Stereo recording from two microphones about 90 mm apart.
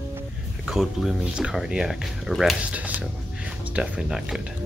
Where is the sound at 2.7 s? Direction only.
15° right (ahead or behind).